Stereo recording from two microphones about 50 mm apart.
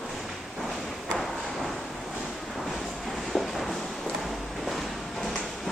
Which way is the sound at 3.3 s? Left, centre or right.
Centre.